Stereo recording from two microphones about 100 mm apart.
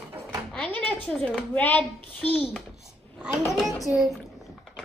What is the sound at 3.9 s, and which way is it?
Speech, 20° right (ahead or behind).